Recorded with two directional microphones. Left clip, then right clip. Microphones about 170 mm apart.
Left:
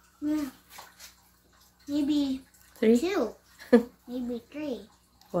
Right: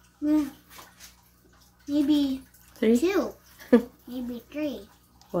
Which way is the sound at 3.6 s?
Centre (ahead or behind).